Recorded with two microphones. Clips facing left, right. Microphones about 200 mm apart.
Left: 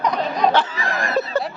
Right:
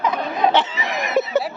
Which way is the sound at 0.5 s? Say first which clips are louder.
Even; 20° right (ahead or behind).